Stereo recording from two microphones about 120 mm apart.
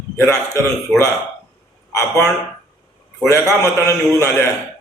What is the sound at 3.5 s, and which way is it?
Speech, 25° left (ahead or behind).